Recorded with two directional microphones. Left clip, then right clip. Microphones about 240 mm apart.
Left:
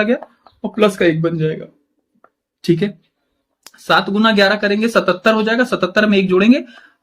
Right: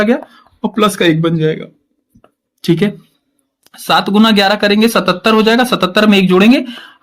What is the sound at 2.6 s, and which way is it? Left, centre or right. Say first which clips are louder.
Speech: right 3 dB; right.